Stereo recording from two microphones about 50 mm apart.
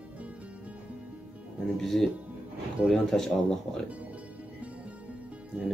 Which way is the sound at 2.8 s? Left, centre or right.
Right.